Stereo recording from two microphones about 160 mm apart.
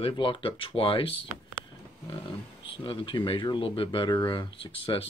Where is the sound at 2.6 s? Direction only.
35° left (ahead or behind).